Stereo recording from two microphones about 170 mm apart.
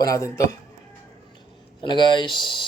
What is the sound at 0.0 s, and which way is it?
Speech, 20° left (ahead or behind).